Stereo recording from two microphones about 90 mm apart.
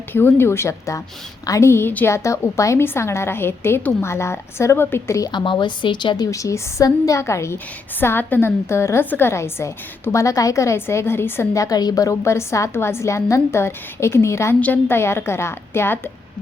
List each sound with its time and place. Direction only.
0.1 s a woman's voice: 25° left (ahead or behind)
2.0 s a woman's voice: 35° left (ahead or behind)
5.3 s a woman's voice: 55° left (ahead or behind)
6.3 s a woman's voice: 35° left (ahead or behind)